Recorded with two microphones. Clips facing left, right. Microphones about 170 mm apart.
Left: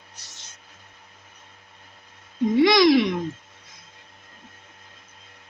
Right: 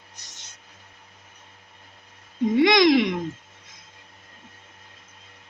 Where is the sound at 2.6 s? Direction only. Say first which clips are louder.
Left 1 dB; 20° right (ahead or behind).